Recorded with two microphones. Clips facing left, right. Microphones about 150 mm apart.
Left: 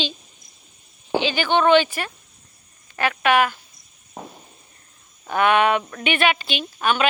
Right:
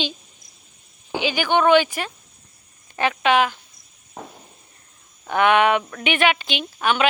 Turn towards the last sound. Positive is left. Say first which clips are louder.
# right 1 dB
turn(degrees=-15)  # may be behind; listen again after turning